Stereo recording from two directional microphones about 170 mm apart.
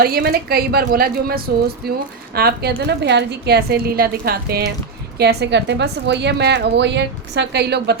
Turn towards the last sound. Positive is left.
turn(degrees=-75)  # may be behind; listen again after turning